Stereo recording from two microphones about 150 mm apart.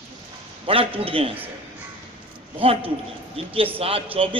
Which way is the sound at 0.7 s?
40° right (ahead or behind).